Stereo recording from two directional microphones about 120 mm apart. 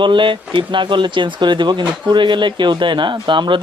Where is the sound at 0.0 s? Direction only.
45° right (ahead or behind).